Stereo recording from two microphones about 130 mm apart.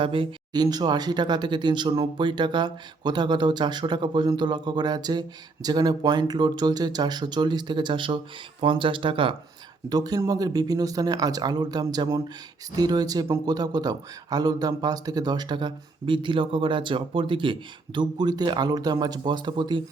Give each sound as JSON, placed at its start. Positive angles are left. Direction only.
{"t": 0.0, "sound": "a man's voice", "side_deg": -40}
{"t": 9.9, "sound": "a man's voice", "side_deg": -30}